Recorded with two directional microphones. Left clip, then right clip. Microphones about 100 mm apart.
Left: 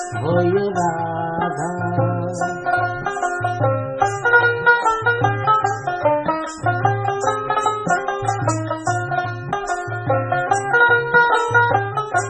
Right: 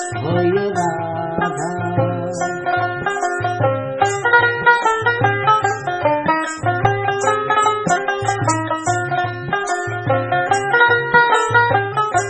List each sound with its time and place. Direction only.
0.3 s music: 5° right (ahead or behind)
2.0 s music: 20° right (ahead or behind)
10.1 s music: 20° right (ahead or behind)